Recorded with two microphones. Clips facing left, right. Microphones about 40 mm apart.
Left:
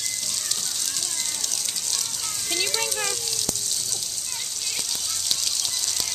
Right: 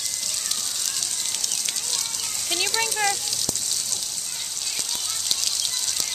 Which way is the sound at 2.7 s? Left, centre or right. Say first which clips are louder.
Right 2 dB; centre.